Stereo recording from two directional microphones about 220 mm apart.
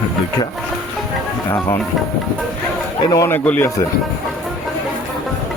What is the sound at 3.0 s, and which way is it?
Speech, 15° left (ahead or behind).